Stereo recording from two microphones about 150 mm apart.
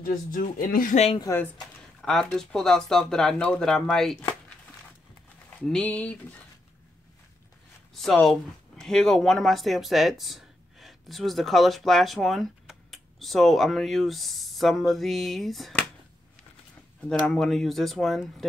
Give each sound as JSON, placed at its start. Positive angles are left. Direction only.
{"t": 0.0, "sound": "speech", "side_deg": 65}
{"t": 1.1, "sound": "speech", "side_deg": 25}
{"t": 2.0, "sound": "speech", "side_deg": 0}
{"t": 5.6, "sound": "speech", "side_deg": 5}
{"t": 7.9, "sound": "speech", "side_deg": 0}
{"t": 17.1, "sound": "speech", "side_deg": 5}